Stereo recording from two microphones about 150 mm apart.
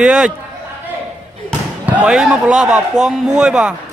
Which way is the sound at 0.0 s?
5° right (ahead or behind).